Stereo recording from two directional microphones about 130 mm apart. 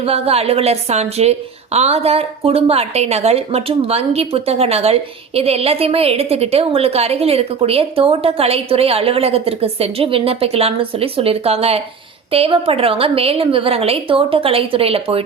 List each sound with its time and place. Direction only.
0.0 s a woman's voice: 50° right (ahead or behind)